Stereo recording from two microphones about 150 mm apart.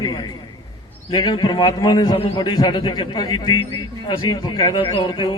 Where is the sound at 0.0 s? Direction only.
30° left (ahead or behind).